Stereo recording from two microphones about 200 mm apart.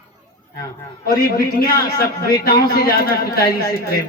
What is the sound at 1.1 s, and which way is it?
A man's voice, 45° left (ahead or behind).